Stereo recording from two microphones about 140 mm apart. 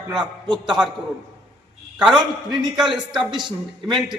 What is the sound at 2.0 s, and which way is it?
Speech, 5° right (ahead or behind).